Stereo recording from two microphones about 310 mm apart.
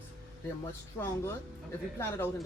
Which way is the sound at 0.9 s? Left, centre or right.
Centre.